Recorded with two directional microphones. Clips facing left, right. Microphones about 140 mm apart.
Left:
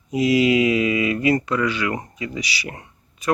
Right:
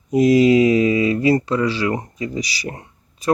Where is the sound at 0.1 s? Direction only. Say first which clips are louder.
Right 5 dB; 45° right (ahead or behind).